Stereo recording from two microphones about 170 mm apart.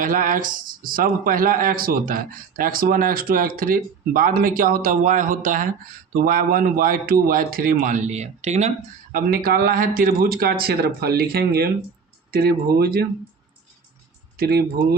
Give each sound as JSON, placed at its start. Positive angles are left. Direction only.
{"t": 0.0, "sound": "speech", "side_deg": -55}
{"t": 9.1, "sound": "speech", "side_deg": -60}
{"t": 14.3, "sound": "speech", "side_deg": -65}